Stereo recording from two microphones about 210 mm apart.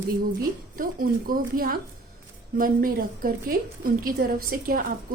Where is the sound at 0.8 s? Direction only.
40° right (ahead or behind).